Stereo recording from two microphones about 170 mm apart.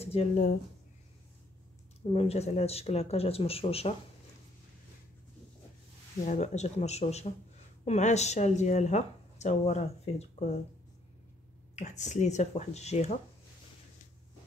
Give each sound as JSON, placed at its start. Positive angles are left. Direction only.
{"t": 0.0, "sound": "a sound", "side_deg": 35}
{"t": 2.0, "sound": "speech", "side_deg": 35}
{"t": 6.2, "sound": "speech", "side_deg": 45}
{"t": 11.7, "sound": "speech", "side_deg": 45}